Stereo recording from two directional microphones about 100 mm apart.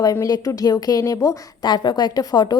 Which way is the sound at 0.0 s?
40° left (ahead or behind).